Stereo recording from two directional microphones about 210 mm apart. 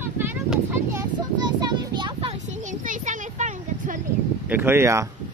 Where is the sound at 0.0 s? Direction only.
10° right (ahead or behind); by 4.0 s 35° right (ahead or behind).